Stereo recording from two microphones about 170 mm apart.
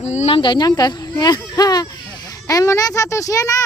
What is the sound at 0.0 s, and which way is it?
A child's voice, 40° left (ahead or behind).